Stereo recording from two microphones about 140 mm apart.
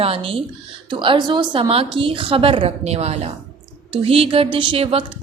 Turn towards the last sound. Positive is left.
turn(degrees=-40)  # may be behind; listen again after turning